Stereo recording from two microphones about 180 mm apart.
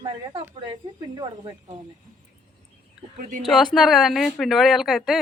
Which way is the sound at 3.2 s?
45° right (ahead or behind).